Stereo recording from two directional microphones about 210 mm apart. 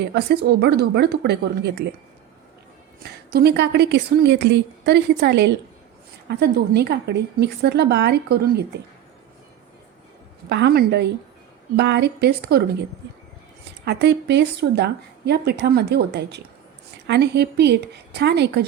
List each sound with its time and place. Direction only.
0.0 s a woman's voice: 55° right (ahead or behind)
3.0 s a woman's voice: 50° right (ahead or behind)
10.5 s a woman's voice: 55° right (ahead or behind)
13.8 s a woman's voice: 55° right (ahead or behind)